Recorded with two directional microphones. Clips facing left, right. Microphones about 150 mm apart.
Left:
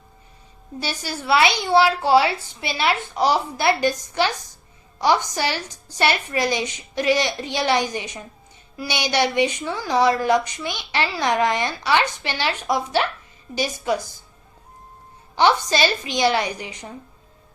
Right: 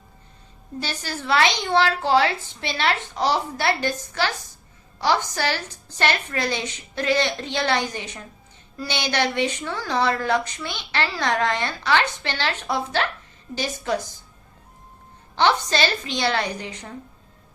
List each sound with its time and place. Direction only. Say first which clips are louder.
0.8 s a woman's voice: left 1 dB; 10° left (ahead or behind)
15.4 s a woman's voice: left 2 dB; 10° left (ahead or behind)